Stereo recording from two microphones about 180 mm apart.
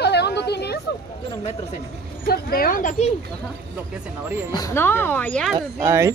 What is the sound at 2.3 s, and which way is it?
Speech, 55° left (ahead or behind).